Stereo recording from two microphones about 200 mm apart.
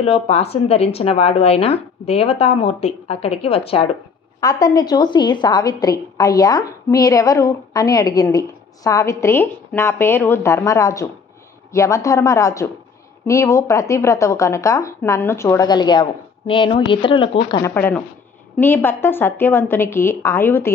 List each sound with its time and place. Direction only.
0.0 s a woman's voice: 30° left (ahead or behind)
4.4 s a woman's voice: 20° left (ahead or behind)